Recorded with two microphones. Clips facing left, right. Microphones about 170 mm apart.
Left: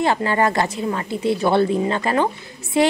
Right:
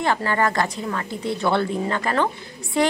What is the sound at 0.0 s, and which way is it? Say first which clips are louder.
A woman's voice: left 3 dB; 20° left (ahead or behind).